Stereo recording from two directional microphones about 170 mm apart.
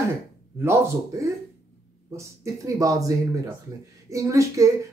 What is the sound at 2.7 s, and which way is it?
Speech, 20° right (ahead or behind).